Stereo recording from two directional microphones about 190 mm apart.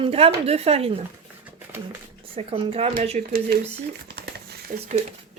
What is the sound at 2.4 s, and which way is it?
Speech, 30° right (ahead or behind).